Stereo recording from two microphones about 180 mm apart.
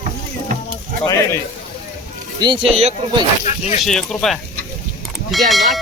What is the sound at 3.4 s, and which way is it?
Speech, 40° left (ahead or behind).